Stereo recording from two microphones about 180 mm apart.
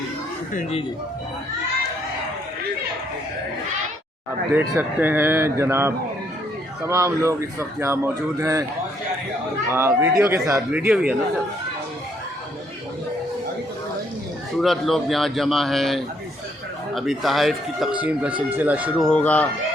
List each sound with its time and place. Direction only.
0.5 s speech: 35° left (ahead or behind)
4.5 s speech: 10° right (ahead or behind)
9.6 s speech: 15° right (ahead or behind)
14.6 s speech: centre (ahead or behind)
19.0 s speech: 5° left (ahead or behind)